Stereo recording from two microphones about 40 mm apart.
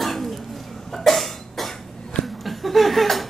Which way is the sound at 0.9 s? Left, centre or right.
Centre.